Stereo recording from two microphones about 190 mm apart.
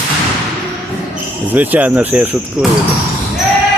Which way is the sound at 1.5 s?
10° right (ahead or behind).